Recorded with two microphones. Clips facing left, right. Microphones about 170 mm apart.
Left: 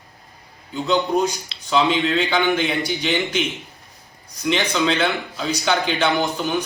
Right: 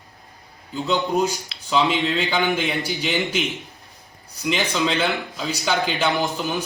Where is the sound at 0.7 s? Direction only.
5° right (ahead or behind).